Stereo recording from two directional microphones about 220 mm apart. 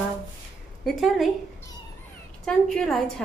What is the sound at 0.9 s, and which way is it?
Speech, centre (ahead or behind).